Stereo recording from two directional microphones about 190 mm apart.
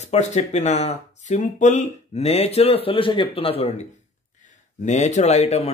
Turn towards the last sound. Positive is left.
turn(degrees=35)  # may be behind; listen again after turning